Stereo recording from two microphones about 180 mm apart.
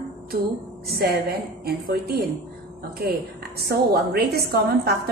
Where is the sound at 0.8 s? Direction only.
60° right (ahead or behind).